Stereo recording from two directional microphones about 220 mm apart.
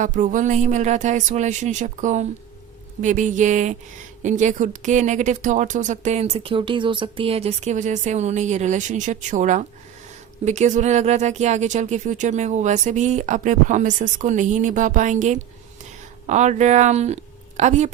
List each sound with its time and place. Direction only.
0.0 s speech: 35° right (ahead or behind)